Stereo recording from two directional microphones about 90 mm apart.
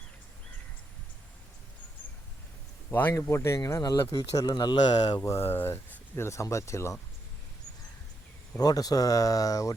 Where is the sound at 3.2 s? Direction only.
35° left (ahead or behind).